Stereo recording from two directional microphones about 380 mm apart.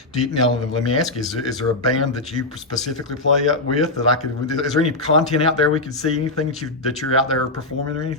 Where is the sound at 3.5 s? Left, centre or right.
Centre.